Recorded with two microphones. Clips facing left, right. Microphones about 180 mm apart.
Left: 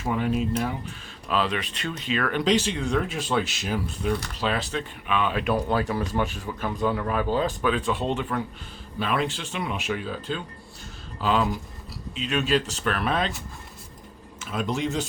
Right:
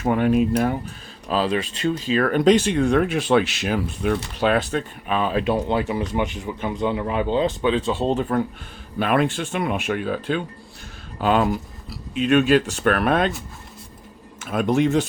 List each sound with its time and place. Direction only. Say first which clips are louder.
0.0 s speech: right 7 dB; 60° right (ahead or behind)
1.3 s speech: right 4 dB; 35° right (ahead or behind); by 4.8 s 55° right (ahead or behind)
5.0 s speech: right 3 dB; 40° right (ahead or behind)
9.0 s speech: right 6 dB; 55° right (ahead or behind)
14.4 s speech: right 8 dB; 55° right (ahead or behind)